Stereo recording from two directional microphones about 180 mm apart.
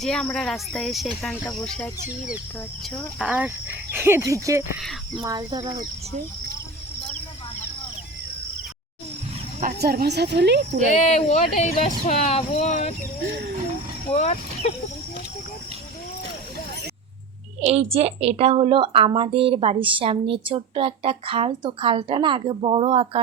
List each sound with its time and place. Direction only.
0.0 s speech: centre (ahead or behind)
3.2 s speech: 5° right (ahead or behind)
4.8 s speech: centre (ahead or behind)
5.2 s speech: 20° right (ahead or behind)
9.6 s speech: 55° right (ahead or behind); by 10.6 s 70° right (ahead or behind)
10.9 s speech: 40° left (ahead or behind)
14.1 s speech: 35° left (ahead or behind)
17.6 s a woman's voice: 35° right (ahead or behind)